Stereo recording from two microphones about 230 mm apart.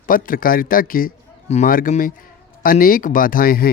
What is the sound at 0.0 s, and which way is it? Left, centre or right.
A man's voice, left.